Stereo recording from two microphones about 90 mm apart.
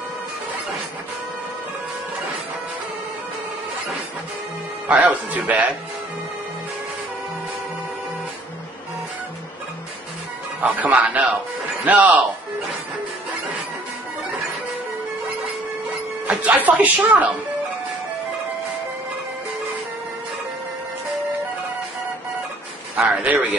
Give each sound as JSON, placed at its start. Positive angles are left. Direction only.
{"t": 4.8, "sound": "speech", "side_deg": -15}
{"t": 10.6, "sound": "speech", "side_deg": -20}
{"t": 16.3, "sound": "speech", "side_deg": -20}
{"t": 22.9, "sound": "speech", "side_deg": -15}